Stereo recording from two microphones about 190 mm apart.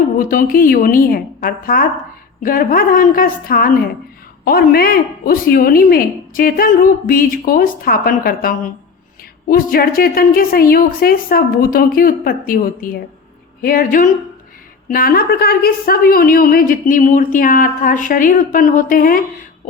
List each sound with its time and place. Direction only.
0.2 s a woman's voice: 45° left (ahead or behind)